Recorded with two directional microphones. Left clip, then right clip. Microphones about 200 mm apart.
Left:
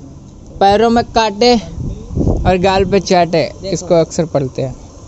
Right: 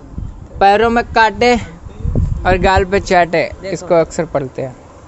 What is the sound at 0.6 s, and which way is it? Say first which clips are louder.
Speech: even; centre (ahead or behind).